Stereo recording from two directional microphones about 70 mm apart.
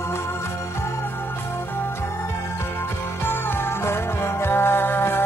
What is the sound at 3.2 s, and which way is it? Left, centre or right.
Music, left.